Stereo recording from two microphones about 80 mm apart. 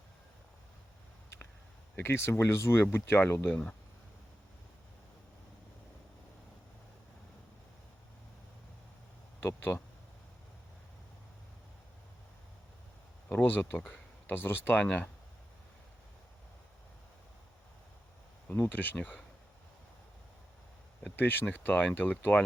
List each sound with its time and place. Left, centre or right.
2.0 s speech: left
3.5 s speech: centre
9.4 s speech: left
13.2 s speech: left
18.7 s speech: left
21.2 s speech: left